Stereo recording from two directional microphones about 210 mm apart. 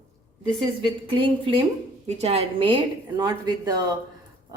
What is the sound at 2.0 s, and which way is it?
A woman's voice, 30° right (ahead or behind).